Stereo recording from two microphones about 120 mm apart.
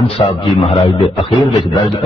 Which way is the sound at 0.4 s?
45° left (ahead or behind).